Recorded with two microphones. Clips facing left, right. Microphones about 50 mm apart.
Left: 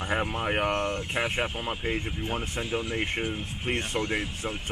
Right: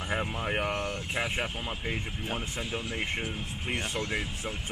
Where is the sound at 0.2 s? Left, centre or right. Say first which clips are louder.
Left 3 dB; centre.